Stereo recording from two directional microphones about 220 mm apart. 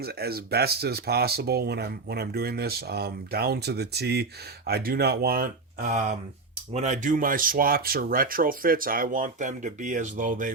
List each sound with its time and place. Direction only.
0.0 s speech: 45° right (ahead or behind)